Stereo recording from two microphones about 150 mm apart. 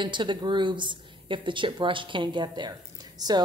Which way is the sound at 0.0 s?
30° right (ahead or behind).